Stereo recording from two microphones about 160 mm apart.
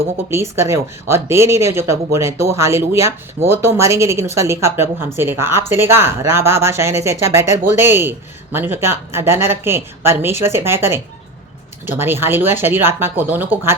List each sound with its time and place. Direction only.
0.3 s speech: 15° right (ahead or behind)